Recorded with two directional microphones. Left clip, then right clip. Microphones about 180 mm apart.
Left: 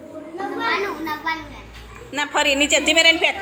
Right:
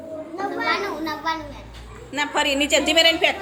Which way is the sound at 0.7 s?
60° right (ahead or behind).